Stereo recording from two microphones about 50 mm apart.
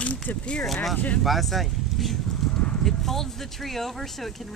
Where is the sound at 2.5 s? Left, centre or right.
Left.